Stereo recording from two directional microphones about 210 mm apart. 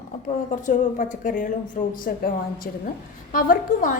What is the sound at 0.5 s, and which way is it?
A woman's voice, 35° left (ahead or behind).